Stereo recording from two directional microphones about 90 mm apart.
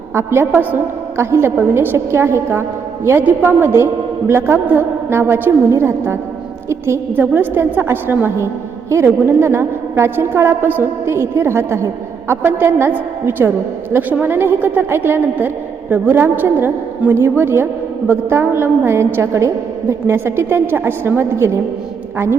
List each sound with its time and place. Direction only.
0.1 s a woman's voice: 30° right (ahead or behind)